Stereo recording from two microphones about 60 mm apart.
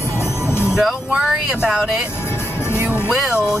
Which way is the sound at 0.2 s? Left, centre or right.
Left.